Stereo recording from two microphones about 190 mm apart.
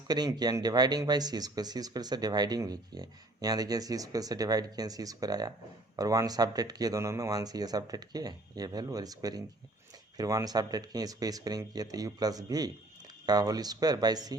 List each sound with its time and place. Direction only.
0.1 s speech: 20° right (ahead or behind)